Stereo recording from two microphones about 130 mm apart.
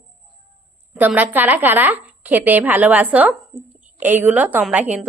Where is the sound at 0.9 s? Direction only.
15° right (ahead or behind).